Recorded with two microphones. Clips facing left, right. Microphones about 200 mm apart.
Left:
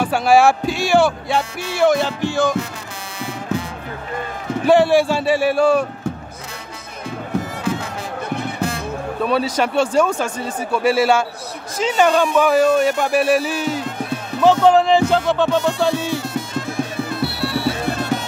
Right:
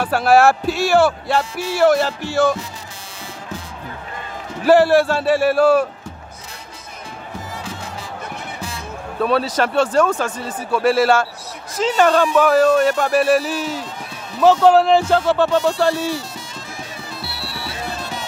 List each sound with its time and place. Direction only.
0.0 s speech: 5° right (ahead or behind)
4.6 s speech: 5° right (ahead or behind)
7.3 s music: 60° left (ahead or behind)
9.2 s speech: centre (ahead or behind)
13.7 s music: 55° left (ahead or behind)
14.4 s speech: 5° right (ahead or behind)
16.3 s bagpipes: 55° left (ahead or behind)